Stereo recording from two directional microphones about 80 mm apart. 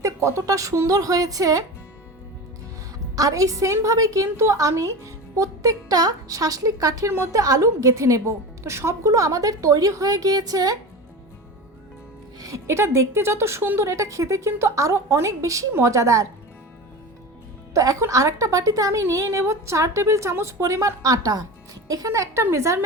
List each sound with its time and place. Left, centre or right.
0.0 s a woman's voice: right
3.2 s a woman's voice: right
12.4 s speech: right
17.7 s speech: right